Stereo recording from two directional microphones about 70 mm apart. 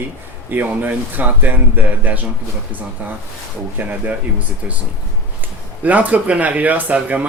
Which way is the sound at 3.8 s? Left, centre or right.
Right.